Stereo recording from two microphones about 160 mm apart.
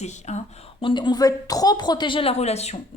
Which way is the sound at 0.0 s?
45° left (ahead or behind).